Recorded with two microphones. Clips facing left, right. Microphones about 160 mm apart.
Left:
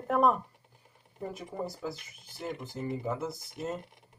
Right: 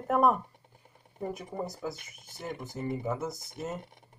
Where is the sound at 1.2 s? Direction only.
20° right (ahead or behind).